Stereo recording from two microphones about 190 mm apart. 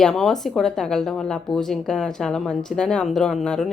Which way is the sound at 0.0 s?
Centre (ahead or behind).